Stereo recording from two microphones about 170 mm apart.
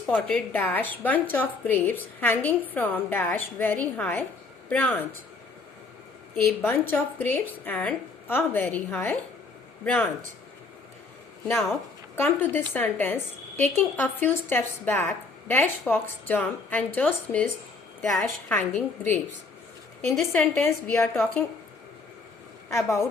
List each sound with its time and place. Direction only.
0.1 s a woman's voice: 10° left (ahead or behind)
6.3 s a woman's voice: 5° left (ahead or behind)
11.4 s a woman's voice: centre (ahead or behind)
12.1 s a woman's voice: 10° left (ahead or behind)
20.3 s a woman's voice: 15° left (ahead or behind)
22.7 s a woman's voice: 15° left (ahead or behind)